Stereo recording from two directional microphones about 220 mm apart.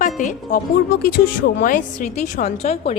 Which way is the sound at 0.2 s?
35° left (ahead or behind).